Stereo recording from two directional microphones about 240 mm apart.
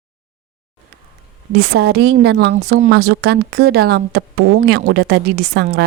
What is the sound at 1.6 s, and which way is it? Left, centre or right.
A woman's voice, right.